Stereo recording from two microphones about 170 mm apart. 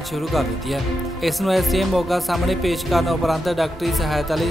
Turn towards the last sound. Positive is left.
turn(degrees=0)  # may be behind; listen again after turning